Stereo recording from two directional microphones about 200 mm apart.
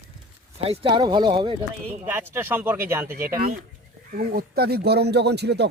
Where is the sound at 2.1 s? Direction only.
10° right (ahead or behind).